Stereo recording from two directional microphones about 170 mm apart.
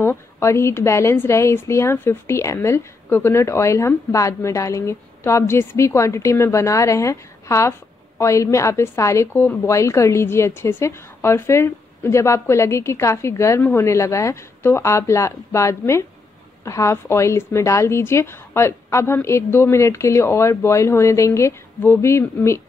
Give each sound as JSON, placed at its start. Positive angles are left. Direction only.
{"t": 0.0, "sound": "a woman's voice", "side_deg": 15}